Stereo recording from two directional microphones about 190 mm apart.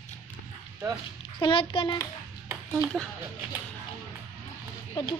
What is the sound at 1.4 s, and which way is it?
Speech, 25° left (ahead or behind).